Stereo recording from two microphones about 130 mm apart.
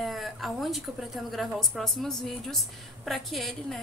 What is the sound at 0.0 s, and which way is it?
A woman's voice, centre (ahead or behind).